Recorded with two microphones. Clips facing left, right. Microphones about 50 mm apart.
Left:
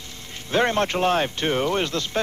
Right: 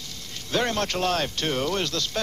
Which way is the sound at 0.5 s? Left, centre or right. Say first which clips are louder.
Left 4 dB; left.